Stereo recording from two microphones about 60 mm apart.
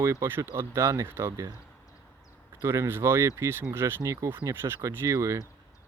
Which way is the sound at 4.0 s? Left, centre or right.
Right.